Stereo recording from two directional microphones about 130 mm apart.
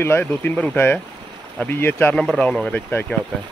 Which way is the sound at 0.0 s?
15° left (ahead or behind).